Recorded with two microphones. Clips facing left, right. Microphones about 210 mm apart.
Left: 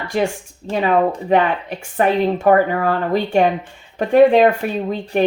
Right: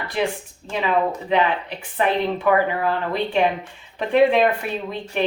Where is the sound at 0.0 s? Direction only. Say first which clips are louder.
Left 4 dB; 45° left (ahead or behind).